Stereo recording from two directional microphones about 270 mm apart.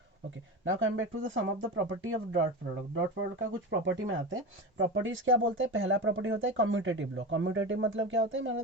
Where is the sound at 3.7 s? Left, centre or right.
Right.